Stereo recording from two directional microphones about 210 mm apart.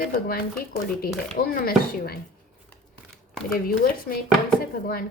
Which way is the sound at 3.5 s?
45° left (ahead or behind).